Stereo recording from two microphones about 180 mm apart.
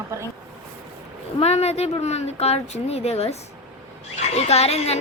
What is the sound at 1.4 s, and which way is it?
A woman's voice, 35° left (ahead or behind).